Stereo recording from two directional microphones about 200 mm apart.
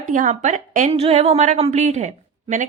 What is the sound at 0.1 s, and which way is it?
Speech, 40° right (ahead or behind).